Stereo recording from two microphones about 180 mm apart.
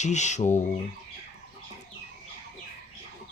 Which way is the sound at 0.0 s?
40° left (ahead or behind).